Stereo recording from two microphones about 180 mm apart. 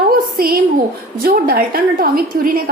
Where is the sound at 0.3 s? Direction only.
55° right (ahead or behind).